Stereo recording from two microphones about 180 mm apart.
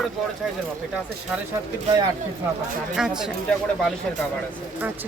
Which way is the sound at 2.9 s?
5° right (ahead or behind).